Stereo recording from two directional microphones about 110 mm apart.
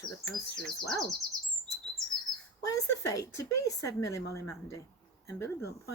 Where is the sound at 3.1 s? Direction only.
30° left (ahead or behind).